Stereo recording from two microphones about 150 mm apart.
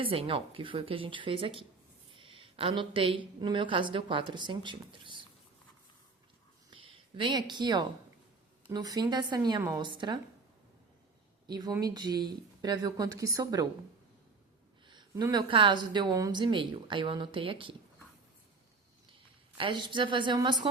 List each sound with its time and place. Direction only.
0.0 s a woman's voice: 40° right (ahead or behind)
6.7 s speech: 35° right (ahead or behind)
11.4 s speech: 25° right (ahead or behind)
15.1 s a woman's voice: 25° right (ahead or behind)
19.5 s a woman's voice: 35° right (ahead or behind)